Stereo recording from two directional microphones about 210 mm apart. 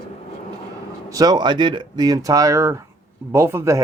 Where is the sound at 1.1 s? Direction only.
20° right (ahead or behind).